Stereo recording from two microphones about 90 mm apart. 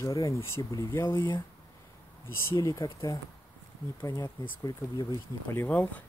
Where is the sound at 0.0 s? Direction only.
35° left (ahead or behind).